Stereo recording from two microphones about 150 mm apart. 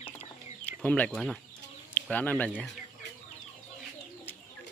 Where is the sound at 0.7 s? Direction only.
10° left (ahead or behind).